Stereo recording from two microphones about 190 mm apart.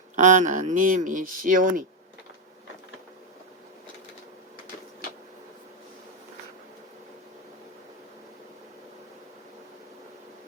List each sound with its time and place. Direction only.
0.2 s speech: 40° right (ahead or behind)